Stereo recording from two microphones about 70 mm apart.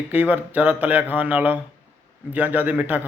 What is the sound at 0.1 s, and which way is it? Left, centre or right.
Speech, right.